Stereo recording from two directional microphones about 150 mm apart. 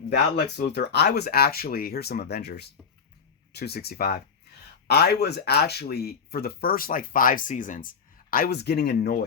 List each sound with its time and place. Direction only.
0.3 s speech: 90° left